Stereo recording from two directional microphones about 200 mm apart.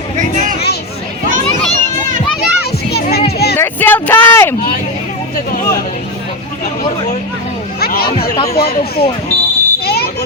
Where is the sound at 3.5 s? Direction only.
10° left (ahead or behind).